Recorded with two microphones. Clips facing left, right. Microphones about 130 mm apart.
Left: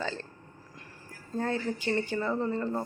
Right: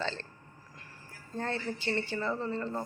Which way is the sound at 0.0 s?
10° left (ahead or behind).